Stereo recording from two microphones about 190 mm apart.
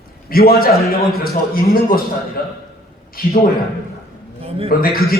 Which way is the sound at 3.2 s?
50° left (ahead or behind).